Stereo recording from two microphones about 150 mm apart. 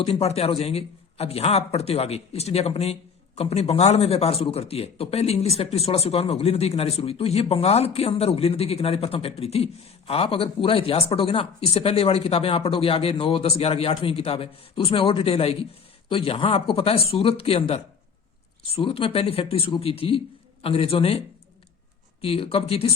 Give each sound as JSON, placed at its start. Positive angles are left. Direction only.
{"t": 0.0, "sound": "a man's voice", "side_deg": 45}
{"t": 22.2, "sound": "speech", "side_deg": 40}